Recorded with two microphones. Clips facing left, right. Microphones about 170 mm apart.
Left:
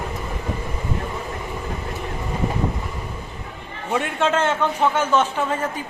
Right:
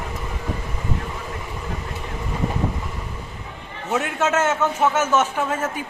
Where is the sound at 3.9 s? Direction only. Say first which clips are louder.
Left 1 dB; 5° right (ahead or behind).